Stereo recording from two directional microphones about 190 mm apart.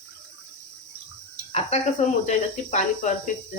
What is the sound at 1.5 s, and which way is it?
Speech, 35° left (ahead or behind).